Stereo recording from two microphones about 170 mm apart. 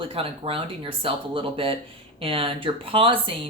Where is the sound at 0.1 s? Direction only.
30° right (ahead or behind).